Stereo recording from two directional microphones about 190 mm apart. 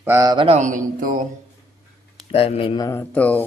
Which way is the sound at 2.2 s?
30° left (ahead or behind).